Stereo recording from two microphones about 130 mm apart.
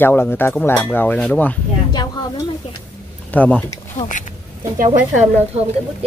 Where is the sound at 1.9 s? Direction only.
35° left (ahead or behind).